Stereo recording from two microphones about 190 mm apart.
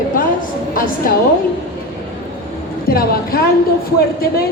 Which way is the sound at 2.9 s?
50° left (ahead or behind).